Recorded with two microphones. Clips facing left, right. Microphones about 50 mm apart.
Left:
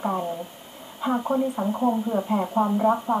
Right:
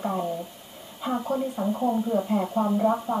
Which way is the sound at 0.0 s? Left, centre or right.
Centre.